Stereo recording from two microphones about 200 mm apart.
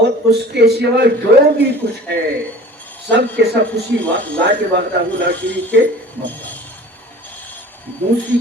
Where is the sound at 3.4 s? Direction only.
60° right (ahead or behind).